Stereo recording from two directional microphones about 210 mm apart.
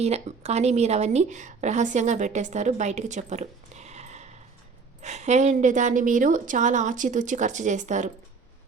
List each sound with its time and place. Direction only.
0.0 s a woman's voice: 30° right (ahead or behind)